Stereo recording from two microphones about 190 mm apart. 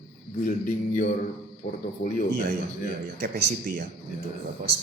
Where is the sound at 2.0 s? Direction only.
40° left (ahead or behind).